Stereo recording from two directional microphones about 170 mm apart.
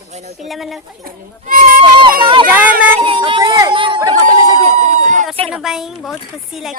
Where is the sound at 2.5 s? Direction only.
10° right (ahead or behind).